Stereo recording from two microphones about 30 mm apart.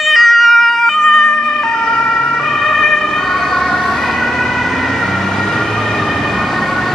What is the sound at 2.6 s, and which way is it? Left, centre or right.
Emergency vehicle, centre.